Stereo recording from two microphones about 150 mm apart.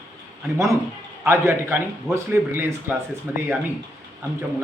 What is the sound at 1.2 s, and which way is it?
A man's voice, 20° right (ahead or behind).